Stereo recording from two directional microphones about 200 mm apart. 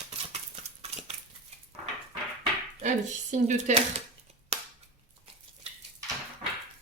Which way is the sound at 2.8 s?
35° right (ahead or behind).